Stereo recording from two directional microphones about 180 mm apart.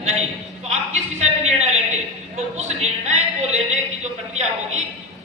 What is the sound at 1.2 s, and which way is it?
A man's voice, 40° right (ahead or behind).